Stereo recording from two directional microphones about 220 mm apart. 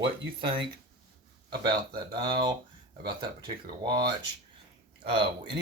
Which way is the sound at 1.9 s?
20° right (ahead or behind).